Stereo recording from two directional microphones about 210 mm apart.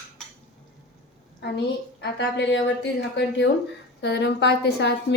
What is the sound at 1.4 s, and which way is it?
A woman's voice, 55° left (ahead or behind).